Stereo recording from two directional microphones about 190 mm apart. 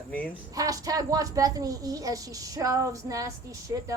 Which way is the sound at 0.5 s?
20° right (ahead or behind).